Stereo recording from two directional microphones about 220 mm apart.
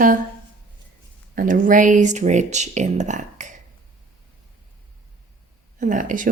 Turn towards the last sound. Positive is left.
turn(degrees=-35)  # may be behind; listen again after turning